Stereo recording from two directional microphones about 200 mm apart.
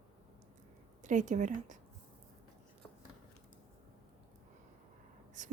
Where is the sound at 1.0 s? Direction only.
40° right (ahead or behind).